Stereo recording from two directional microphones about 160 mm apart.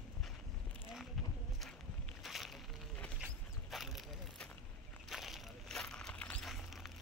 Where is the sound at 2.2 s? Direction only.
Centre (ahead or behind).